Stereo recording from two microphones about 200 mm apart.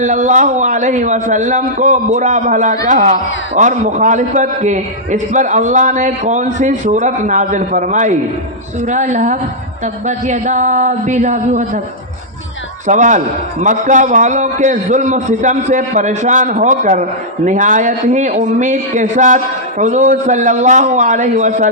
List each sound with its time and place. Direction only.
0.0 s a man's voice: 35° right (ahead or behind)
12.9 s a man's voice: 40° right (ahead or behind)